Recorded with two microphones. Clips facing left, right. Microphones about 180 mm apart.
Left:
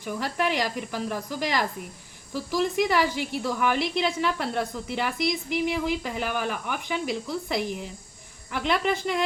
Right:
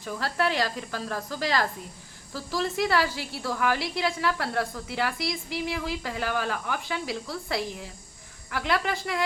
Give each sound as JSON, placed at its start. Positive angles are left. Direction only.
{"t": 0.0, "sound": "a woman's voice", "side_deg": 15}